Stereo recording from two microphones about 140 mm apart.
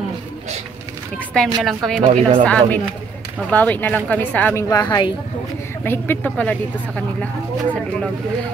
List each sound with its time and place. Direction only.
1.1 s speech: 5° left (ahead or behind)
2.1 s speech: 55° right (ahead or behind)
2.4 s speech: 10° left (ahead or behind)
4.6 s speech: 25° left (ahead or behind)
5.9 s speech: 10° left (ahead or behind)